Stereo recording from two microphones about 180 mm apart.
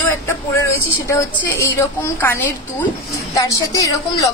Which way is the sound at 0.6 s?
15° left (ahead or behind).